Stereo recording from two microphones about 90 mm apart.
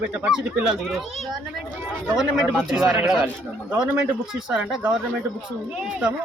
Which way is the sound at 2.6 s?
10° right (ahead or behind).